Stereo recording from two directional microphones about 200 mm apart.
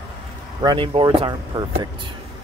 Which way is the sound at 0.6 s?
25° right (ahead or behind).